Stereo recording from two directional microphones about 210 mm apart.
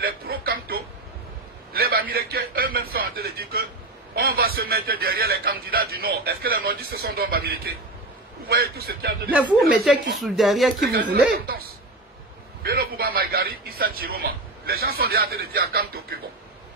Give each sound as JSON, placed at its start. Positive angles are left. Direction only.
{"t": 0.0, "sound": "a sound", "side_deg": -45}
{"t": 1.7, "sound": "a man's voice", "side_deg": -45}
{"t": 9.4, "sound": "speech", "side_deg": -5}
{"t": 10.8, "sound": "a man's voice", "side_deg": -50}
{"t": 12.6, "sound": "a man's voice", "side_deg": -45}